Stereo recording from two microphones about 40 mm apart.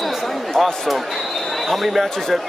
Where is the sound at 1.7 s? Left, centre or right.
Centre.